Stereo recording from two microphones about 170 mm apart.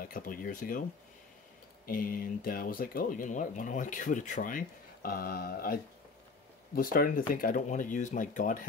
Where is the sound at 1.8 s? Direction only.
55° left (ahead or behind).